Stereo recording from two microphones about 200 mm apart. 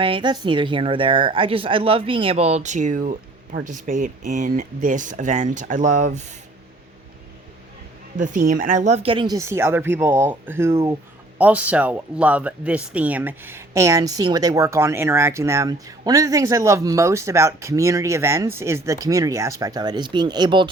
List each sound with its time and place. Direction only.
0.0 s speech: 25° right (ahead or behind)
8.2 s speech: 40° right (ahead or behind); by 20.7 s 20° right (ahead or behind)